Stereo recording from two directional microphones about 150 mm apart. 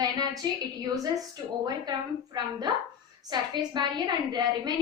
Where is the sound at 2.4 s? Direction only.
30° right (ahead or behind).